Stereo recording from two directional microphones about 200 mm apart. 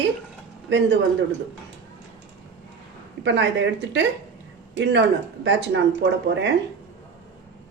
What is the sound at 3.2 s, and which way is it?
Speech, 65° right (ahead or behind).